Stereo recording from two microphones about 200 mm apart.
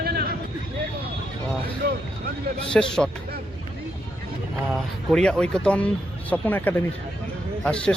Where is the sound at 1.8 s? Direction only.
50° right (ahead or behind).